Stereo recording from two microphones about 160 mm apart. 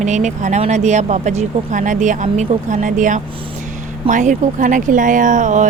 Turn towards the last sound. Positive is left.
turn(degrees=-50)  # may be behind; listen again after turning